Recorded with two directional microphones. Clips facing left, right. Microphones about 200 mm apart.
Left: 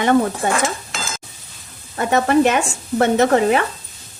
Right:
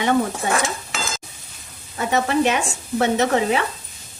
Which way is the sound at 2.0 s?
50° left (ahead or behind).